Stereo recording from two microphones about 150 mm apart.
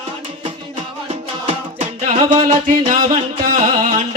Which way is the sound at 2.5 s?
60° right (ahead or behind).